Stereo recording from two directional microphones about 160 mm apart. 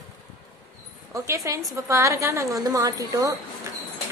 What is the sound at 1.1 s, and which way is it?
A woman's voice, 20° right (ahead or behind).